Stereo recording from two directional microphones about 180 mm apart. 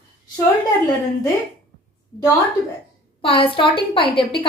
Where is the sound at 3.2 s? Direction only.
30° left (ahead or behind).